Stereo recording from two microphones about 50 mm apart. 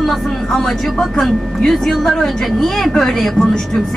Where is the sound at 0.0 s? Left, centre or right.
Centre.